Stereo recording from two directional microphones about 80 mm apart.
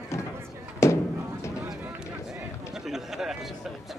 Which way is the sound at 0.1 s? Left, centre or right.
Left.